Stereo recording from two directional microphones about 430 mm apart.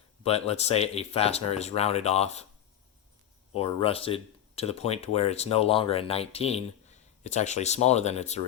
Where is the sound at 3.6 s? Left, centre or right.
Centre.